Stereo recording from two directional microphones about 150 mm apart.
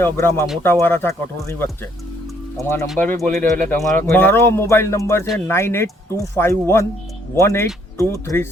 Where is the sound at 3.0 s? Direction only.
10° left (ahead or behind).